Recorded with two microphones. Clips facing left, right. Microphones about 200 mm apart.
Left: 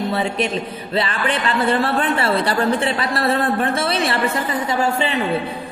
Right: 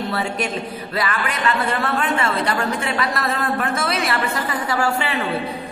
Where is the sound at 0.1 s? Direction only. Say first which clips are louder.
Left 3 dB; 25° left (ahead or behind).